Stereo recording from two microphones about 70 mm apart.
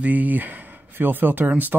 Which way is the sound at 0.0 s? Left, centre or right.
Right.